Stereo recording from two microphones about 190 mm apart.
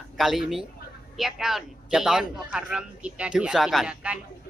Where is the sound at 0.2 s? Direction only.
Centre (ahead or behind).